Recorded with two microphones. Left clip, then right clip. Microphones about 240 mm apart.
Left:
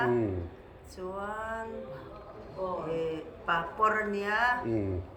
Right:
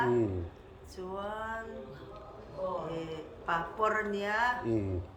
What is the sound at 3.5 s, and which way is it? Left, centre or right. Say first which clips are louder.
A woman's voice: left 3 dB; centre.